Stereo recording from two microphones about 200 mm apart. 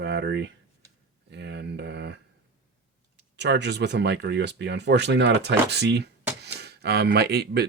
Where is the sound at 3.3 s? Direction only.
60° right (ahead or behind).